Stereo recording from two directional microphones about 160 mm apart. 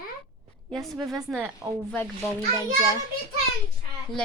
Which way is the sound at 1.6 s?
15° right (ahead or behind).